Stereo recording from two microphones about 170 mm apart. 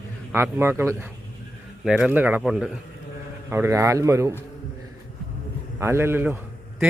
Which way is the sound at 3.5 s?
15° right (ahead or behind).